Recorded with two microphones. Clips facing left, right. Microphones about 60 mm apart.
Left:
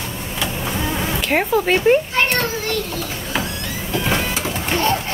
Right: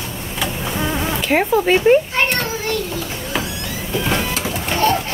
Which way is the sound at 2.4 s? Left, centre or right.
Right.